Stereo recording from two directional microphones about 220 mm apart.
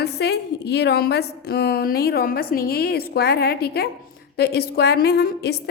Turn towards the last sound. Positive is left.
turn(degrees=45)  # may be behind; listen again after turning